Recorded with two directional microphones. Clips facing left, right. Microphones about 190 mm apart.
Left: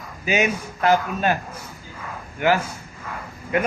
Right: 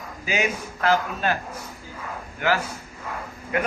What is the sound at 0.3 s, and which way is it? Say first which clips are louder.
Speech: left 4 dB; 20° left (ahead or behind).